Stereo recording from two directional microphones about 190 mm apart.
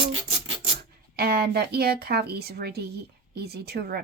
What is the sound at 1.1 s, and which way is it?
A woman's voice, 55° right (ahead or behind).